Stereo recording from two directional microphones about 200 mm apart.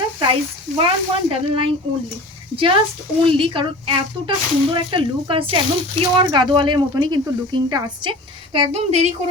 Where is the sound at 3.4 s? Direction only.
25° right (ahead or behind).